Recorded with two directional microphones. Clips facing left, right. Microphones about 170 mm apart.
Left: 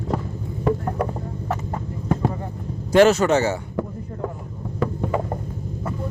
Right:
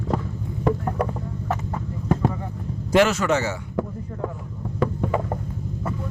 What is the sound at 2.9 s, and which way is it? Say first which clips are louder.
Speech: left 4 dB; 35° left (ahead or behind).